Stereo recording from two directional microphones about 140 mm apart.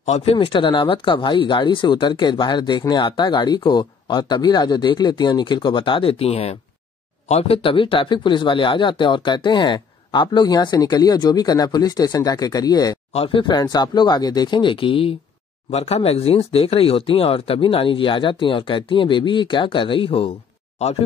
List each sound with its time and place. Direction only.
0.0 s speech: 50° left (ahead or behind); by 13.0 s 30° left (ahead or behind)
13.1 s speech: 40° left (ahead or behind)